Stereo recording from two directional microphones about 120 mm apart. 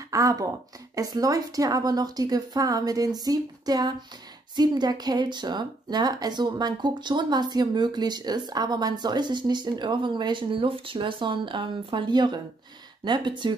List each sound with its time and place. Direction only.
0.1 s speech: 30° right (ahead or behind)